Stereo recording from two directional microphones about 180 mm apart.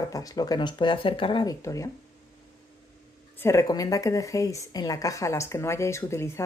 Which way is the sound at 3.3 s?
15° left (ahead or behind).